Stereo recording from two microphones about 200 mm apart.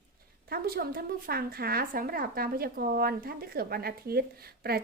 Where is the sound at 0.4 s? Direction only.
50° right (ahead or behind).